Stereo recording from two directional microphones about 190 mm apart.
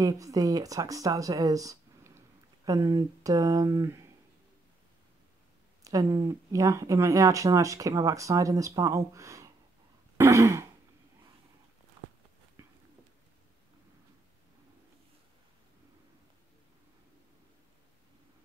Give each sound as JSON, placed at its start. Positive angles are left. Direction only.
{"t": 0.0, "sound": "speech", "side_deg": -20}
{"t": 5.9, "sound": "speech", "side_deg": -20}
{"t": 10.1, "sound": "throat clearing", "side_deg": -15}